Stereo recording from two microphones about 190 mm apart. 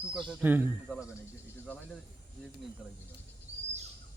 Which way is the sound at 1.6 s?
5° left (ahead or behind).